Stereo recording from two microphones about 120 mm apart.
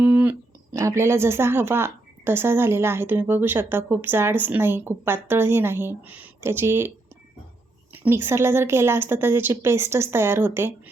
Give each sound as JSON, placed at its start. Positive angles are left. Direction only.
{"t": 0.0, "sound": "a sound", "side_deg": -15}
{"t": 0.7, "sound": "speech", "side_deg": -25}
{"t": 7.9, "sound": "speech", "side_deg": -20}